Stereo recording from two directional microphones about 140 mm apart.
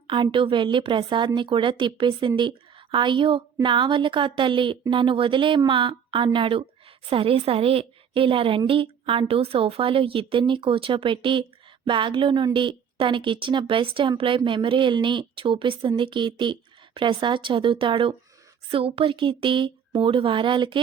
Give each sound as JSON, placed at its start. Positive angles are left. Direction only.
{"t": 0.1, "sound": "speech", "side_deg": -35}